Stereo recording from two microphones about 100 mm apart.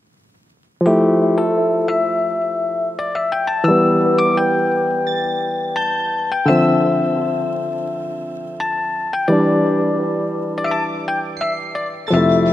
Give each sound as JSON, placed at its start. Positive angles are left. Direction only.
{"t": 0.7, "sound": "electric piano", "side_deg": 0}
{"t": 1.9, "sound": "music", "side_deg": -5}
{"t": 7.0, "sound": "music", "side_deg": 15}
{"t": 9.1, "sound": "music", "side_deg": 0}
{"t": 12.1, "sound": "music", "side_deg": -15}